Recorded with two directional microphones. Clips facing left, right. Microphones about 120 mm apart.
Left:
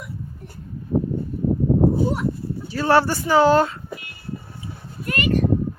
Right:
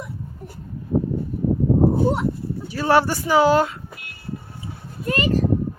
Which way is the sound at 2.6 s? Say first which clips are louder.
Even; 15° right (ahead or behind).